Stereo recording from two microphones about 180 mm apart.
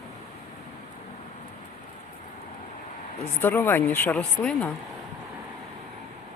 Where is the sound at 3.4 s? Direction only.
10° left (ahead or behind).